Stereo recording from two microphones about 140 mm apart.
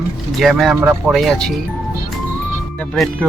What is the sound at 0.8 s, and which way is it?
Speech, 10° right (ahead or behind).